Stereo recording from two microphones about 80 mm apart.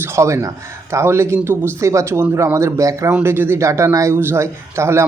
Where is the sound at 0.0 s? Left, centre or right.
Right.